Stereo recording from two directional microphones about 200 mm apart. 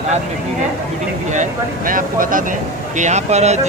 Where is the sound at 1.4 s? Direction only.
45° right (ahead or behind).